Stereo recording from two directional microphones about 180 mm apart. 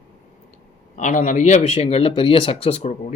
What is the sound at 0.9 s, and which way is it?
Speech, 45° left (ahead or behind).